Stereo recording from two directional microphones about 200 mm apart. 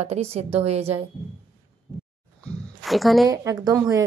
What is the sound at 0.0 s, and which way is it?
Speech, 30° right (ahead or behind).